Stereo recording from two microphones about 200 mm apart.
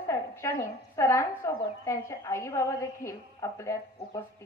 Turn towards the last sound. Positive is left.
turn(degrees=15)  # may be behind; listen again after turning